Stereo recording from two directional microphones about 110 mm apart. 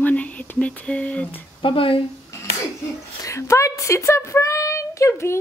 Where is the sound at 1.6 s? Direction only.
55° left (ahead or behind).